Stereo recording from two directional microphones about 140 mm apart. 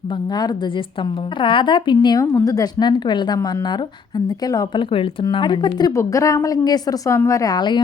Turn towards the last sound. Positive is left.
turn(degrees=30)  # may be behind; listen again after turning